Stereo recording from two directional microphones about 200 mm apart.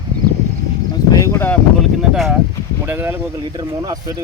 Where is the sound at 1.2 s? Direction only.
10° left (ahead or behind).